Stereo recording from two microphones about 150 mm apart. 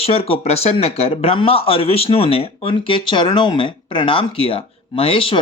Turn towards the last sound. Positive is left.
turn(degrees=35)  # may be behind; listen again after turning